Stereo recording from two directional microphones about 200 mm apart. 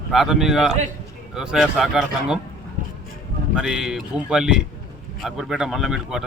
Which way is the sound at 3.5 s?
Centre (ahead or behind).